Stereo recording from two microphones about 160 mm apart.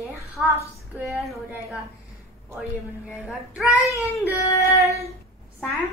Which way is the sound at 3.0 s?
5° right (ahead or behind).